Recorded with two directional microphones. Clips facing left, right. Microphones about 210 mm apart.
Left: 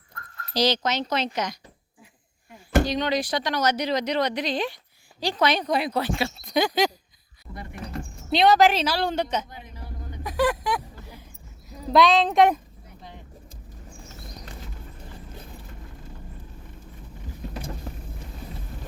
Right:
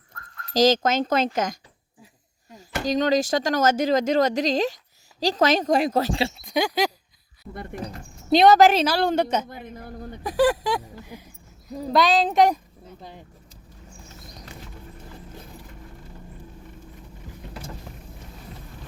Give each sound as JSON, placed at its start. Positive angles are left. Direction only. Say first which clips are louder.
{"t": 0.5, "sound": "speech", "louder": "right 5 dB", "side_deg": -45}
{"t": 2.8, "sound": "speech", "louder": "right 4 dB", "side_deg": -45}
{"t": 6.5, "sound": "a sound", "louder": "left 2 dB", "side_deg": -10}
{"t": 8.3, "sound": "speech", "louder": "right 4 dB", "side_deg": -45}
{"t": 10.2, "sound": "speech", "louder": "right 4 dB", "side_deg": -30}
{"t": 11.9, "sound": "speech", "louder": "left 1 dB", "side_deg": 0}